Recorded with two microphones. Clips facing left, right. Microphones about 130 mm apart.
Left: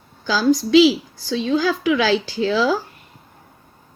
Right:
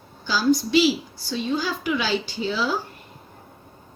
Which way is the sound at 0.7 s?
90° left.